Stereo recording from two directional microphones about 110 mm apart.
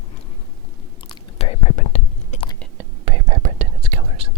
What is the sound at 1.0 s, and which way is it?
Whispering, 60° left (ahead or behind).